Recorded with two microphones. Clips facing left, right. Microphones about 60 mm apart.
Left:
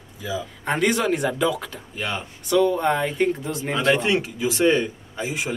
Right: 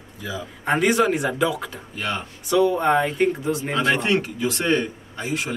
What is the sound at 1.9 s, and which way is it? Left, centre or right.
A man's voice, centre.